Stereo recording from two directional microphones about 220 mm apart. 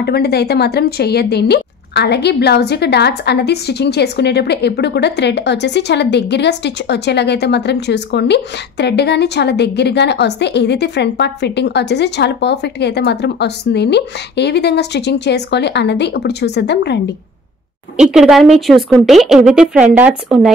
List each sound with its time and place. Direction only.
0.0 s speech: 45° left (ahead or behind)
17.9 s a woman's voice: 5° right (ahead or behind)